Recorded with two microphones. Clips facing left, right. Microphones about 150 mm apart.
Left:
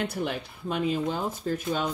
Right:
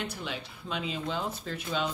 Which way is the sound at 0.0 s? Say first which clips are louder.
Left 7 dB; 55° left (ahead or behind).